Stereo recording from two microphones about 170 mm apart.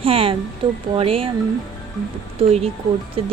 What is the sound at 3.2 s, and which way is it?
Speech, 35° right (ahead or behind).